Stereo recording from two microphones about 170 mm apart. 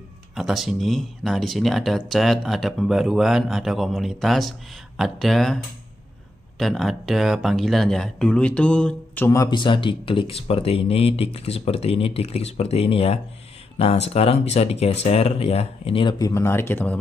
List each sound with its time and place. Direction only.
0.3 s speech: centre (ahead or behind)
6.6 s speech: centre (ahead or behind)